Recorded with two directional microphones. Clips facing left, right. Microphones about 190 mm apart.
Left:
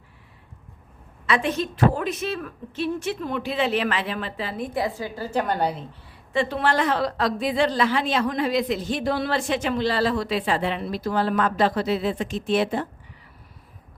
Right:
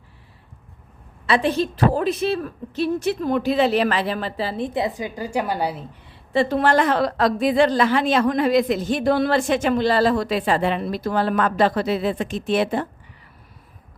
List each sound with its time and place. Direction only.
1.3 s a woman's voice: 30° right (ahead or behind); by 5.8 s 5° right (ahead or behind)
6.3 s a woman's voice: 40° right (ahead or behind)